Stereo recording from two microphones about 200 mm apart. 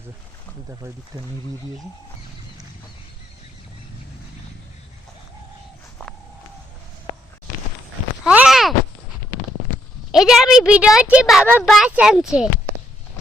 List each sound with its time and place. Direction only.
0.7 s speech: 20° right (ahead or behind)
8.2 s a sound: 5° right (ahead or behind)
10.1 s a woman's voice: centre (ahead or behind)